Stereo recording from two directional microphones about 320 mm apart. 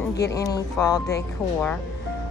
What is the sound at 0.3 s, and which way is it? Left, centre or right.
Speech, centre.